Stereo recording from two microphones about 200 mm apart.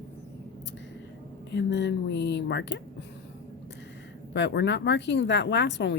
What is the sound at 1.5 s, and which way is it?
Speech, 60° left (ahead or behind).